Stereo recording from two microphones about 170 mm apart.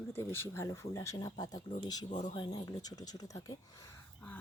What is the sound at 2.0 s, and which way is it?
Speech, 45° left (ahead or behind).